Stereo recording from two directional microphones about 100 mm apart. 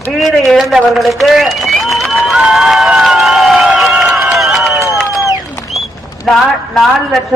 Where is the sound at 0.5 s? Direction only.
5° right (ahead or behind).